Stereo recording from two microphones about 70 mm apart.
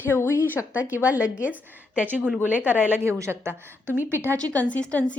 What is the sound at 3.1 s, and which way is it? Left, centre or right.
A woman's voice, right.